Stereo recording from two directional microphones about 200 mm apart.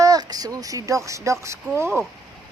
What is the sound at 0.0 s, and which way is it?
Speech, 20° right (ahead or behind).